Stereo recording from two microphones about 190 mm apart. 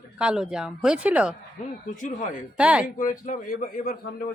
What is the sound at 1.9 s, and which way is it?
Speech, 45° left (ahead or behind).